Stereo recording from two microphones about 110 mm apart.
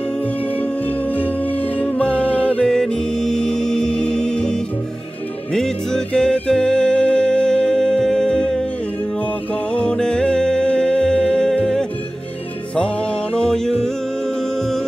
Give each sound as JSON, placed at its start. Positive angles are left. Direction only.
{"t": 0.6, "sound": "music", "side_deg": 15}
{"t": 9.7, "sound": "music", "side_deg": 10}